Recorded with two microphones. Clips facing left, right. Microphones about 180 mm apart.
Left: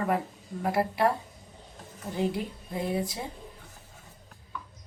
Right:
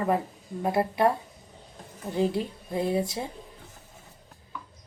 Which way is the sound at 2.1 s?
25° right (ahead or behind).